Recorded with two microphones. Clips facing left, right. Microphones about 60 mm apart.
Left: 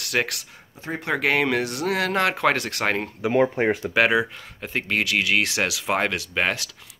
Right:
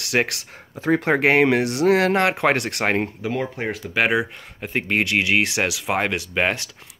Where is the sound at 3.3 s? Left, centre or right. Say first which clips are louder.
Left 8 dB; left.